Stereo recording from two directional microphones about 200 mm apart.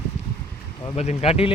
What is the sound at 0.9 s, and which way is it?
Speech, 30° left (ahead or behind).